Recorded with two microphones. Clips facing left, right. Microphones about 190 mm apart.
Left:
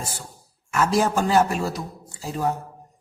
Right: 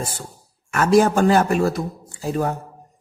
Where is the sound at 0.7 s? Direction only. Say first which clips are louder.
Right 5 dB; 60° right (ahead or behind).